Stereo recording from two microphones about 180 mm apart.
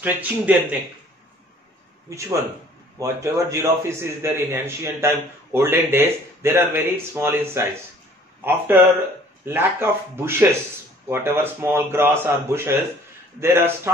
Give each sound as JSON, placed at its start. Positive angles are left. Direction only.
{"t": 0.0, "sound": "a man's voice", "side_deg": -10}
{"t": 2.0, "sound": "a man's voice", "side_deg": -15}